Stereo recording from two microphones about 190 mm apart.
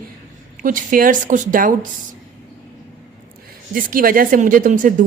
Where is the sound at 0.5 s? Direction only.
45° right (ahead or behind).